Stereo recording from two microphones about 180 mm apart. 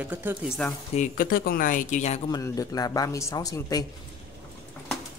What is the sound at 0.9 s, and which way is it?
Speech, 50° left (ahead or behind).